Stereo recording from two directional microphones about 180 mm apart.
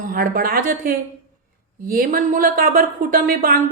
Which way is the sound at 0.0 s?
50° right (ahead or behind).